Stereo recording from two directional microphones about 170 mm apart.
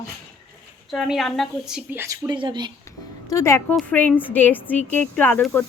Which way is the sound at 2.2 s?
25° right (ahead or behind).